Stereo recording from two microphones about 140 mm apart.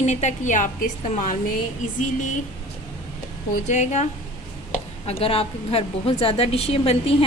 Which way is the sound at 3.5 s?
55° left (ahead or behind).